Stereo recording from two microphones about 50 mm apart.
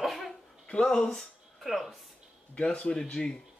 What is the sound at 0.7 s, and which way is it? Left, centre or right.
Speech, centre.